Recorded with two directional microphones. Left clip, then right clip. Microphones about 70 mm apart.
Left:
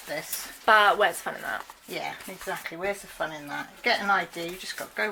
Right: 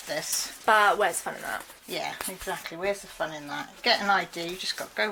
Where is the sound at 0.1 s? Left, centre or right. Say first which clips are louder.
Right 3 dB; right.